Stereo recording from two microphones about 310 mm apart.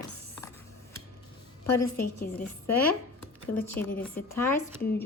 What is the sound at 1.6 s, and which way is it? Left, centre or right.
Speech, left.